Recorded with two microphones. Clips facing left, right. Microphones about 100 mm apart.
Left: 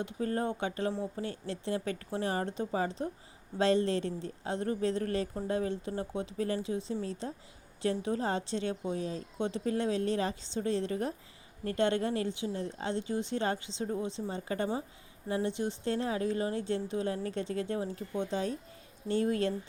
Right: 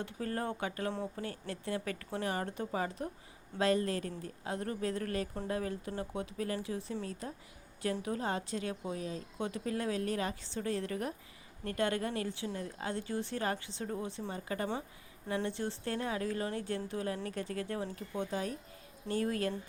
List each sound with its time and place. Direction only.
0.0 s a woman's voice: 25° left (ahead or behind)
15.4 s a woman's voice: 15° left (ahead or behind)